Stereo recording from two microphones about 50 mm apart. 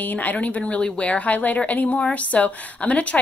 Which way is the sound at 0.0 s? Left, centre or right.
Left.